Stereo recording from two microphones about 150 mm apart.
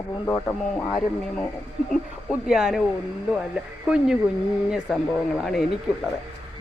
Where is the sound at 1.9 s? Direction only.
Centre (ahead or behind).